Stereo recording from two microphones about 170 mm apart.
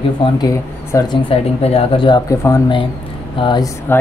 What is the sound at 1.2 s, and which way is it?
Speech, 35° left (ahead or behind).